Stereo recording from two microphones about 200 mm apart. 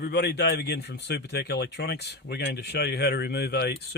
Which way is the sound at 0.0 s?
55° left (ahead or behind).